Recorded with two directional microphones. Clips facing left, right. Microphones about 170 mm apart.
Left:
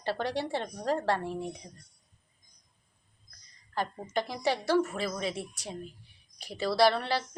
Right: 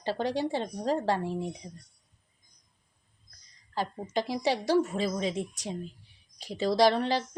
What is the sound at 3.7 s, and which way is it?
Speech, 10° right (ahead or behind).